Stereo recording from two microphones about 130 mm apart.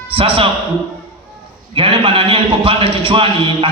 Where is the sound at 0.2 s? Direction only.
45° right (ahead or behind).